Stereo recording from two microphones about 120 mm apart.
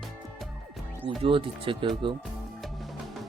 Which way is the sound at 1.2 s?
45° right (ahead or behind).